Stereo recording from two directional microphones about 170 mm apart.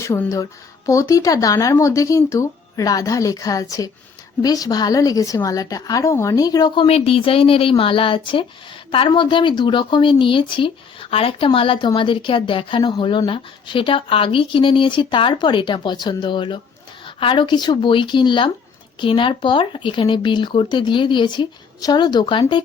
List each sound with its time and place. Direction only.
0.0 s a woman's voice: 15° left (ahead or behind)